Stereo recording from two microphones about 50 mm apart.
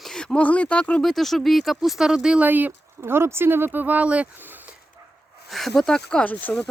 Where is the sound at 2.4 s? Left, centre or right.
Right.